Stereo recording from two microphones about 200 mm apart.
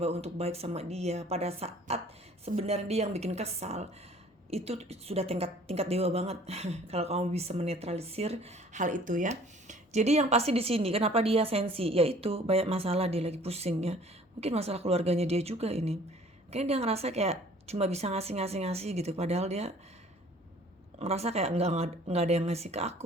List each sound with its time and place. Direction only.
0.0 s a woman's voice: 30° right (ahead or behind)
21.0 s a woman's voice: 30° right (ahead or behind)